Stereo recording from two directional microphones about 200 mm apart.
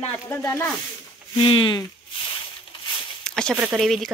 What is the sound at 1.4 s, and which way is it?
Speech, 25° left (ahead or behind).